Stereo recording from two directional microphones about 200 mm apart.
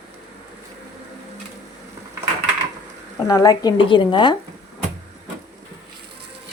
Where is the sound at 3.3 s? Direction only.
20° left (ahead or behind).